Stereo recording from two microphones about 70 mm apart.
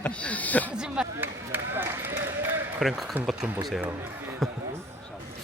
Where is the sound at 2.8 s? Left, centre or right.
Centre.